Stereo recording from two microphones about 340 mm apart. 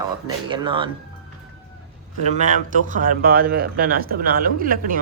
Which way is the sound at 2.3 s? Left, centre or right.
Right.